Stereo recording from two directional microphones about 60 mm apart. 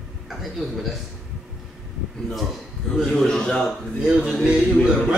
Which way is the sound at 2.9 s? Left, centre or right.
Centre.